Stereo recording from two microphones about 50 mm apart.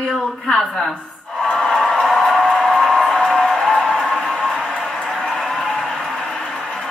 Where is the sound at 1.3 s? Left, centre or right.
Centre.